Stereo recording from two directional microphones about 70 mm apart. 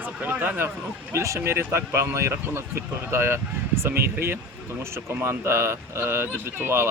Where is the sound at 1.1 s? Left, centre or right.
Right.